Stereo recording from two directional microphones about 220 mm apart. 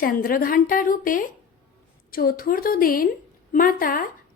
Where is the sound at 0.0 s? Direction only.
40° left (ahead or behind).